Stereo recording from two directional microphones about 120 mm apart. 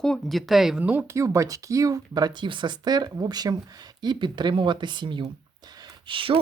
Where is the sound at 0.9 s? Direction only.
20° right (ahead or behind).